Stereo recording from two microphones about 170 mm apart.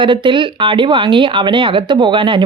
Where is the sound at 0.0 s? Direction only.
30° right (ahead or behind).